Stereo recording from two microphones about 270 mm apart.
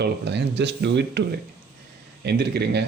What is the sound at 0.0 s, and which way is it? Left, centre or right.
Speech, right.